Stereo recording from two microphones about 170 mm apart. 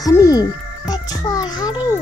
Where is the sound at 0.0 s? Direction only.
20° left (ahead or behind).